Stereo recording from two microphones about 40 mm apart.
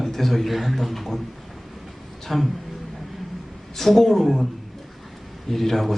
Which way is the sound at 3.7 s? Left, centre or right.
Centre.